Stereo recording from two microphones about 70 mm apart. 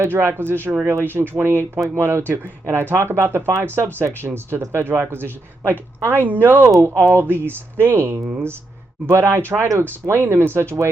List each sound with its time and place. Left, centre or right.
0.1 s speech: right